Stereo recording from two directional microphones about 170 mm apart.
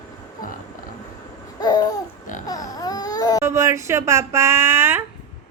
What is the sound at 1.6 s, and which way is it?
Babbling, 25° left (ahead or behind).